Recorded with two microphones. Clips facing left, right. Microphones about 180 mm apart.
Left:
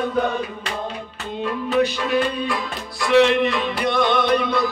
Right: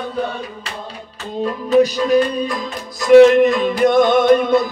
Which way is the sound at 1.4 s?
40° right (ahead or behind).